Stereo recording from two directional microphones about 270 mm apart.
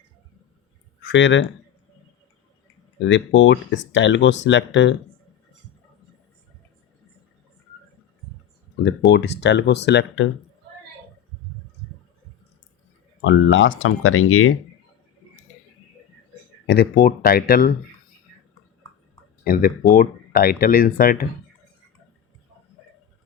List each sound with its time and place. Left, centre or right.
1.0 s speech: left
3.0 s speech: left
8.7 s speech: left
13.2 s speech: left
16.6 s speech: left
19.5 s speech: left